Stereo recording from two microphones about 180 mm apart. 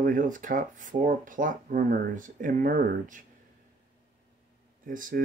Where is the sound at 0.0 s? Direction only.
45° right (ahead or behind).